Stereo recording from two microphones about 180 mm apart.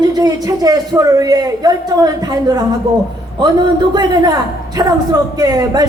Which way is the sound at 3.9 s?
25° right (ahead or behind).